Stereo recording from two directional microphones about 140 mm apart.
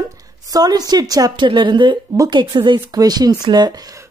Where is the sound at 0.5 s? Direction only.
25° right (ahead or behind).